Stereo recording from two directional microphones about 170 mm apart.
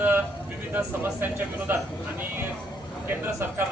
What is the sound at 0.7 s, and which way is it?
A man's voice, 10° right (ahead or behind).